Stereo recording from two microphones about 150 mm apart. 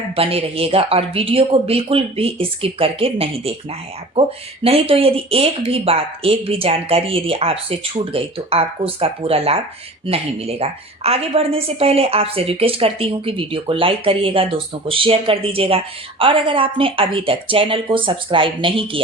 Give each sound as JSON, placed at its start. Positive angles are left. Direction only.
{"t": 0.2, "sound": "a woman's voice", "side_deg": -40}
{"t": 4.6, "sound": "a woman's voice", "side_deg": -40}